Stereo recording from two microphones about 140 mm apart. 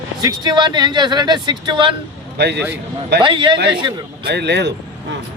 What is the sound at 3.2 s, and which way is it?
Speech, 35° right (ahead or behind).